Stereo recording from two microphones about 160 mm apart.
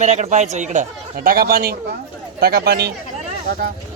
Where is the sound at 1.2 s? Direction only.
65° right (ahead or behind).